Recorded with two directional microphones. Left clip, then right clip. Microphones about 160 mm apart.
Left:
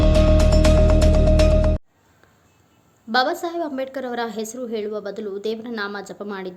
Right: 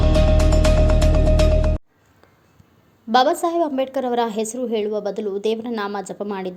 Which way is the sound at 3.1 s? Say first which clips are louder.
Right 4 dB; 15° right (ahead or behind).